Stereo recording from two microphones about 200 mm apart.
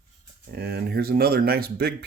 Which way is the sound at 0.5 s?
50° right (ahead or behind).